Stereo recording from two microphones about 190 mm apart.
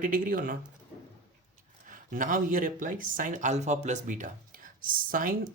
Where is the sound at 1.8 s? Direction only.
45° right (ahead or behind).